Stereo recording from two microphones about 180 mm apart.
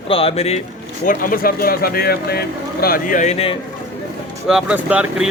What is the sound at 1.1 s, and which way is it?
Speech, 50° left (ahead or behind).